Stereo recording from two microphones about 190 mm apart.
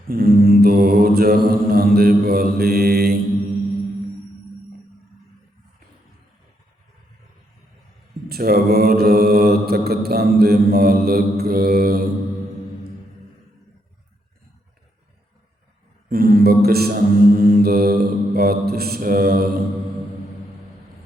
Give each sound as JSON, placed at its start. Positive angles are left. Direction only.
{"t": 0.1, "sound": "mantra", "side_deg": -50}
{"t": 8.3, "sound": "mantra", "side_deg": -50}
{"t": 16.0, "sound": "mantra", "side_deg": -50}